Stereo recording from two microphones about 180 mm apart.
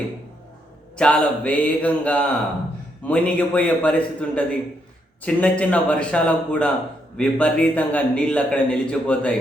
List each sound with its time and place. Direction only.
0.9 s a man's voice: 5° left (ahead or behind)